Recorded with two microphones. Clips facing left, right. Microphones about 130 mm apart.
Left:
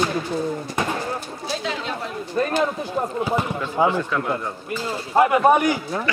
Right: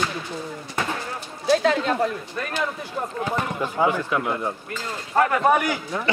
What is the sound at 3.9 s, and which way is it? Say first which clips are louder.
Speech: left 1 dB; 15° right (ahead or behind).